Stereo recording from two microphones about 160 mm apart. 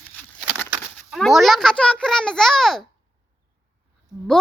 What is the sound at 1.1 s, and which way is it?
A child's voice, centre (ahead or behind).